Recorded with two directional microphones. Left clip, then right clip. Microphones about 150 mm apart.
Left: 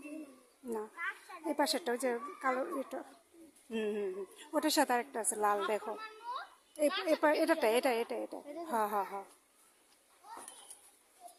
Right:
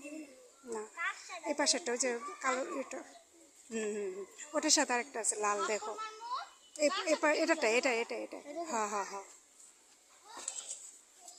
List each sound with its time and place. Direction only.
0.7 s a child's voice: 20° left (ahead or behind)
3.7 s a woman's voice: 30° left (ahead or behind)